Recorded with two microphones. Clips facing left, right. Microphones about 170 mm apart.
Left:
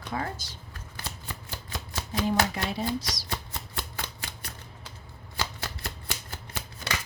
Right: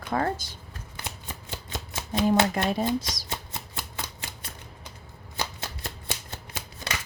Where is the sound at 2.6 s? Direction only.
50° right (ahead or behind).